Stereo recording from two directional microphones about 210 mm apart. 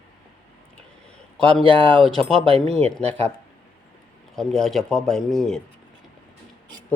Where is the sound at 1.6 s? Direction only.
25° right (ahead or behind).